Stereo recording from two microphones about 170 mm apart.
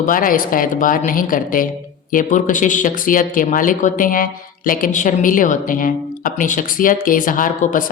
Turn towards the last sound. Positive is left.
turn(degrees=50)  # may be behind; listen again after turning